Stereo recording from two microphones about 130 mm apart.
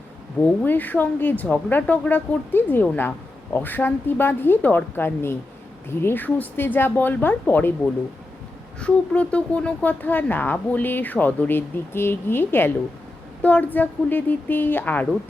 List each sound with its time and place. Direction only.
0.4 s speech: 15° left (ahead or behind)
8.8 s speech: 10° left (ahead or behind)